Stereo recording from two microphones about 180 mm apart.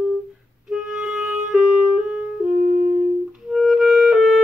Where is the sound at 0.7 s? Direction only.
5° right (ahead or behind).